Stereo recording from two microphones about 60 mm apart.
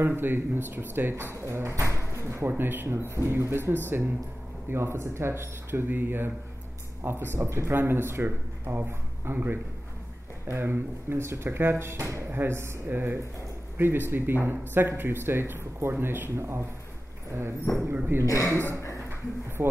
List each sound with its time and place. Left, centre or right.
0.0 s speech: right
7.3 s speech: right
7.7 s speech: right
17.3 s clip-clop: right
18.2 s a man's voice: left
18.5 s speech: right